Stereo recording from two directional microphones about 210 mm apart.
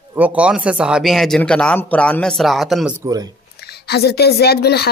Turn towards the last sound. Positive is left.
turn(degrees=50)  # may be behind; listen again after turning